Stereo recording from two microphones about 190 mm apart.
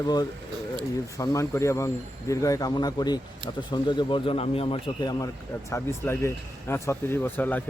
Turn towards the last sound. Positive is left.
turn(degrees=10)  # may be behind; listen again after turning